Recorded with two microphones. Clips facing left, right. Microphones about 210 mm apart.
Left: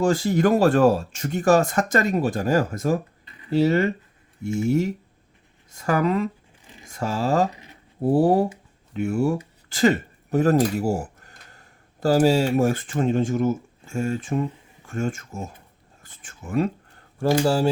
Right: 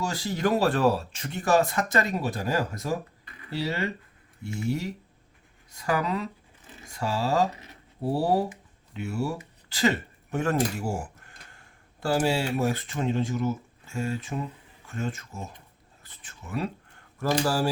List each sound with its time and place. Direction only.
0.0 s speech: 50° left (ahead or behind)
3.2 s a sound: 25° left (ahead or behind)
3.6 s speech: 50° left (ahead or behind)
5.7 s speech: 50° left (ahead or behind)
17.4 s speech: 25° left (ahead or behind)